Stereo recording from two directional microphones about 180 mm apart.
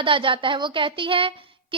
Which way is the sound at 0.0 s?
30° right (ahead or behind).